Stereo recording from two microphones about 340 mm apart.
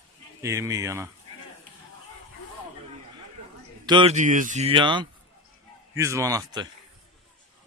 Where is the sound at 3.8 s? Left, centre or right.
Centre.